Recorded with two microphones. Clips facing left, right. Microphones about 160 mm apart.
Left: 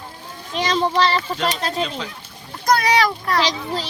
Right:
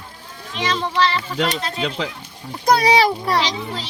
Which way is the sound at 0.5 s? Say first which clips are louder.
Left 2 dB; 35° left (ahead or behind).